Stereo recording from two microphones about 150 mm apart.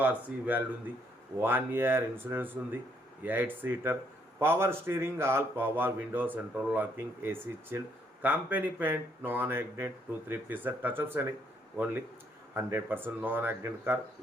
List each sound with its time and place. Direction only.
0.0 s speech: 10° right (ahead or behind)
12.5 s speech: 15° right (ahead or behind)